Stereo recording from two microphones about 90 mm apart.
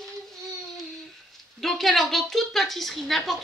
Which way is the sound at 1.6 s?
Centre (ahead or behind).